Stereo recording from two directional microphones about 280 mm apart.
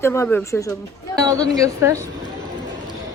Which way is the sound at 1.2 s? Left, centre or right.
Centre.